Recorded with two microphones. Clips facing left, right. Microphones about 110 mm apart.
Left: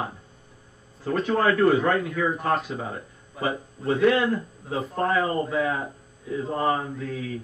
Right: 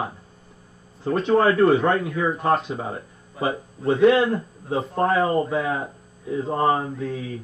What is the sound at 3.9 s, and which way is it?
Speech, 25° right (ahead or behind).